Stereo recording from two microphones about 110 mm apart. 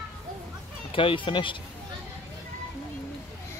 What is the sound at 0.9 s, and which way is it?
Speech, 50° left (ahead or behind).